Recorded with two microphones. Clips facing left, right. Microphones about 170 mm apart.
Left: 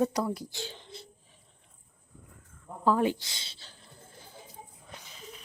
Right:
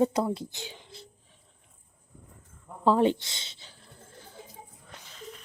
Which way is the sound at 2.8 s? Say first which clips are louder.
Right 3 dB; 25° right (ahead or behind).